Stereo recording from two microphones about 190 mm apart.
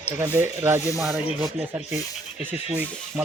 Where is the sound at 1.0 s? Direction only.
Centre (ahead or behind).